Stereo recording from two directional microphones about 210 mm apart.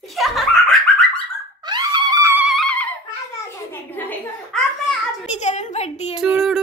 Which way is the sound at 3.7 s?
10° left (ahead or behind).